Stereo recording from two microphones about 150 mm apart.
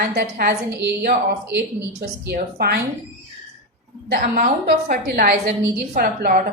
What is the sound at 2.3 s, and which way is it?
Speech, 90° right.